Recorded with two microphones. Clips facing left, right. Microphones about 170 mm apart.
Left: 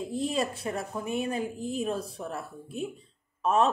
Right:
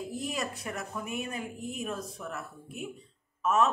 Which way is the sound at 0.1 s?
30° left (ahead or behind).